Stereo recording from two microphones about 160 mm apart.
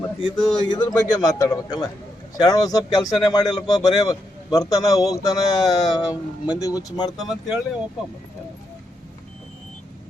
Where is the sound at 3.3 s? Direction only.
25° left (ahead or behind).